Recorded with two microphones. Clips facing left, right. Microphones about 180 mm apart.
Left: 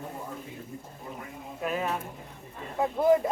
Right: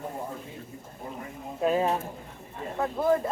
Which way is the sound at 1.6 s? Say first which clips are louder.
Right 6 dB; 30° right (ahead or behind).